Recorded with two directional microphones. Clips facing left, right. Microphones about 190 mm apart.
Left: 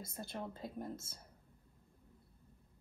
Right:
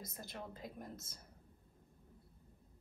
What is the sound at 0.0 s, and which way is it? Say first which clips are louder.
Speech: left 4 dB; 30° left (ahead or behind).